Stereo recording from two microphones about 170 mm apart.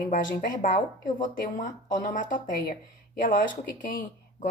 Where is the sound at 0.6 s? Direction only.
50° left (ahead or behind).